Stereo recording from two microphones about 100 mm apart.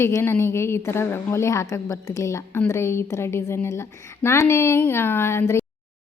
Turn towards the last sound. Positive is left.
turn(degrees=25)  # may be behind; listen again after turning